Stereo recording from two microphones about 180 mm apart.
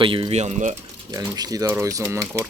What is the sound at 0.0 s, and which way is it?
Speech, 30° right (ahead or behind).